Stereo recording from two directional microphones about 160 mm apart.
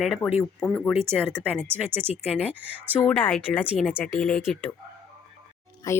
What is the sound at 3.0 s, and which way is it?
Speech, 5° left (ahead or behind).